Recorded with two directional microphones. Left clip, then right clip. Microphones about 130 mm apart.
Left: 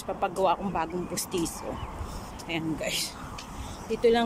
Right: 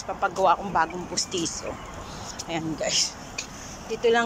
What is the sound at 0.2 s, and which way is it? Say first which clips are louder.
Speech: right 4 dB; 25° left (ahead or behind).